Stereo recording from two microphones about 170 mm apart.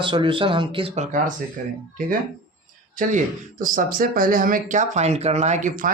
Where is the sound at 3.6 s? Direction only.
55° right (ahead or behind).